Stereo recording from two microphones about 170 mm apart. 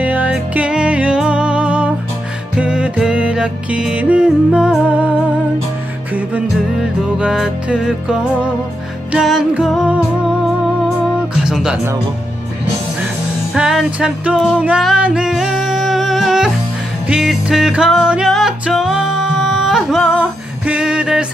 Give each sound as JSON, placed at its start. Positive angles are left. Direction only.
{"t": 0.0, "sound": "music", "side_deg": -10}
{"t": 6.1, "sound": "music", "side_deg": -5}
{"t": 11.4, "sound": "music", "side_deg": -5}
{"t": 13.6, "sound": "music", "side_deg": -5}